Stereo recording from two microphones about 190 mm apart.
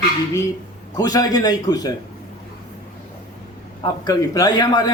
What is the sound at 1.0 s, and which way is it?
Speech, 20° left (ahead or behind).